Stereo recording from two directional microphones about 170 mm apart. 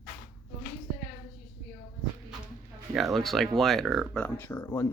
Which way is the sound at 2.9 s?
Centre (ahead or behind).